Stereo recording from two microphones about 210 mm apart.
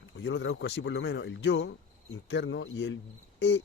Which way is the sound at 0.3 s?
60° left (ahead or behind).